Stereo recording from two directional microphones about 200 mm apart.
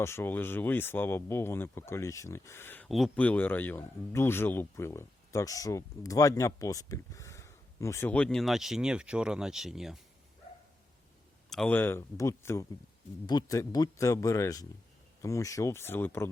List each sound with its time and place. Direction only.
0.0 s speech: 10° left (ahead or behind)
11.4 s speech: 5° left (ahead or behind)